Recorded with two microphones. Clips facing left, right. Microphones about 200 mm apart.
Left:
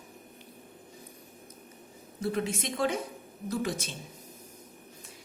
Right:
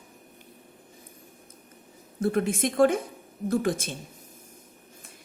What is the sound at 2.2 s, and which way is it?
A woman's voice, 55° right (ahead or behind).